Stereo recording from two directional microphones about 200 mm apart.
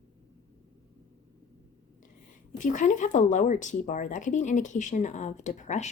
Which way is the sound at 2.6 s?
40° left (ahead or behind).